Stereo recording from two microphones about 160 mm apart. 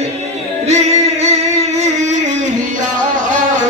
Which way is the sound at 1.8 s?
45° right (ahead or behind).